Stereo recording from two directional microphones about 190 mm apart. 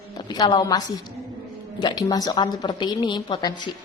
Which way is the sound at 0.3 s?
20° left (ahead or behind).